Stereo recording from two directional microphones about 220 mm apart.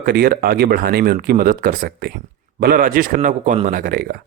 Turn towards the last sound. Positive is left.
turn(degrees=-40)  # may be behind; listen again after turning